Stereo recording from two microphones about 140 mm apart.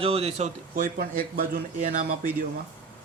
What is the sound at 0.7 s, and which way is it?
Speech, 80° right.